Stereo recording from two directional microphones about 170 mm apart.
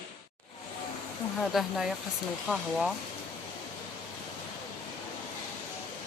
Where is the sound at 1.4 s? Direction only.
Centre (ahead or behind).